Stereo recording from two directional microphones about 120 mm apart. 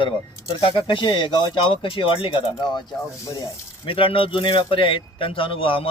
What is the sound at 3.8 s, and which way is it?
A man's voice, 45° left (ahead or behind).